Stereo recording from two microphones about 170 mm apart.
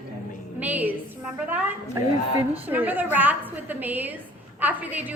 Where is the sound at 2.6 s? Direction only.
10° right (ahead or behind).